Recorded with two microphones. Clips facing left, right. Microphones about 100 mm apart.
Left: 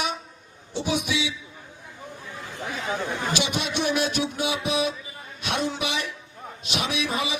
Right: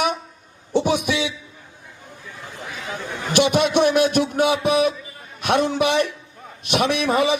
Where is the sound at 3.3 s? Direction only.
55° right (ahead or behind).